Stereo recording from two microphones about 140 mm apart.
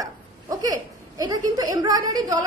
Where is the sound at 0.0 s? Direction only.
25° right (ahead or behind).